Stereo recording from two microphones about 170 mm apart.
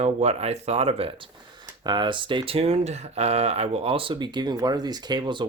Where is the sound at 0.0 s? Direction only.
40° right (ahead or behind).